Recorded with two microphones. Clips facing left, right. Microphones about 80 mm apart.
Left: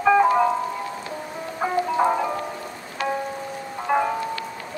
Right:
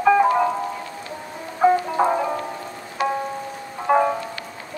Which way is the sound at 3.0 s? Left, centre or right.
Centre.